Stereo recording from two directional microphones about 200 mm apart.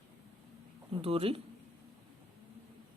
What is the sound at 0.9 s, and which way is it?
Speech, 30° right (ahead or behind).